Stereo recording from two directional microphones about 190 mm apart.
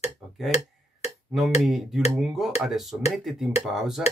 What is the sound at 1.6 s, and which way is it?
Speech, centre (ahead or behind).